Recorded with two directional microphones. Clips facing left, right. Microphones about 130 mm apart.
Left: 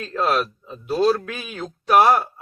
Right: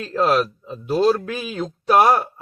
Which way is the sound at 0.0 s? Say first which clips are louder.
Right 3 dB; 30° right (ahead or behind).